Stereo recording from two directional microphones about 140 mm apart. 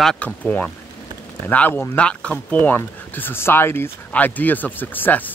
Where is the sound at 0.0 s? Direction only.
5° left (ahead or behind).